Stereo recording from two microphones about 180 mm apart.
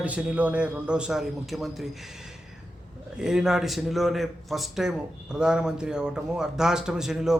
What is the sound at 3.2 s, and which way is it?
Speech, 5° right (ahead or behind).